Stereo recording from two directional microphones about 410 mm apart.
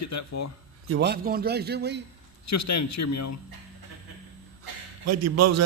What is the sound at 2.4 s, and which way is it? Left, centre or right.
Speech, left.